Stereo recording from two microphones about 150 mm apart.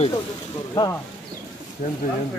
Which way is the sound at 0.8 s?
25° left (ahead or behind).